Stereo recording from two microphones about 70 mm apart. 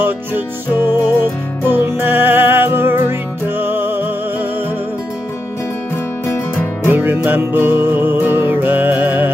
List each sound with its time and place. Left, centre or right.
0.8 s music: right
6.2 s music: left
6.9 s music: right